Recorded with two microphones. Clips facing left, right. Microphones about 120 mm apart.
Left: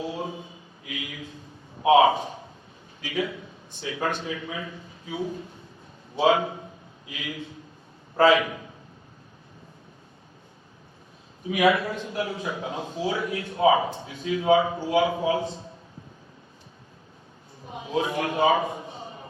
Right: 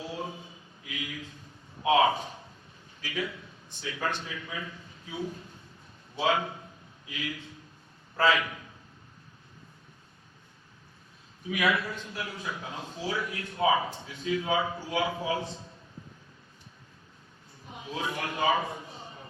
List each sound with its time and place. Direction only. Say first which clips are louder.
0.0 s a sound: left 5 dB; 20° left (ahead or behind)
1.8 s a man's voice: left 6 dB; 25° left (ahead or behind)
6.1 s speech: left 7 dB; 25° left (ahead or behind)
11.4 s speech: left 7 dB; 25° left (ahead or behind)
17.7 s a man's voice: left 8 dB; 25° left (ahead or behind)